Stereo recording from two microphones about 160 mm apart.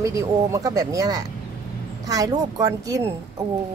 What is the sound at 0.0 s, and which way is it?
A woman's voice, 20° right (ahead or behind).